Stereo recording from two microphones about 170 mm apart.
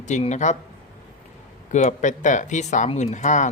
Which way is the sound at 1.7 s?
45° left (ahead or behind).